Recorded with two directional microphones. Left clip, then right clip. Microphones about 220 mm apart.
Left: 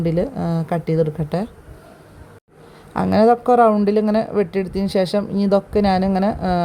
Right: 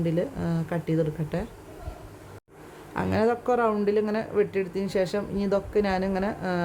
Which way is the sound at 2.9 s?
30° left (ahead or behind).